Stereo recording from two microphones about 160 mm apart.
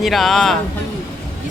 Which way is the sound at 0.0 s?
Centre (ahead or behind).